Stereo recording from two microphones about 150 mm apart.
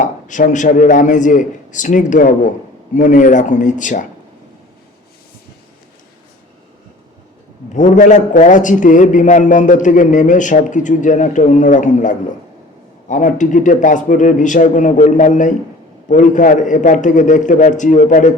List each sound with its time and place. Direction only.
0.0 s a man's voice: 55° left (ahead or behind)
7.7 s a man's voice: 55° left (ahead or behind)